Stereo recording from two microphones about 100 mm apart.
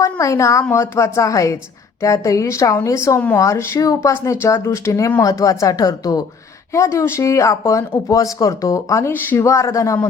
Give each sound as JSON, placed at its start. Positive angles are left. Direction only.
{"t": 0.0, "sound": "speech", "side_deg": 30}